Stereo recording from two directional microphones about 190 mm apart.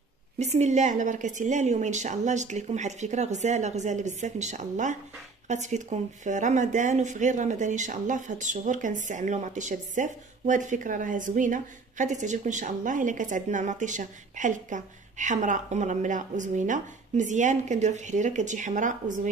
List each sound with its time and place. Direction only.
0.4 s speech: 35° right (ahead or behind)